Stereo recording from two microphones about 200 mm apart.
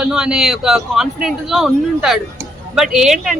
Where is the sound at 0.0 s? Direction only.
5° right (ahead or behind).